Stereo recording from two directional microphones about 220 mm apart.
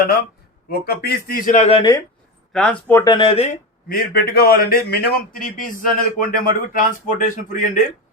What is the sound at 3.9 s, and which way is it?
A man's voice, 40° left (ahead or behind).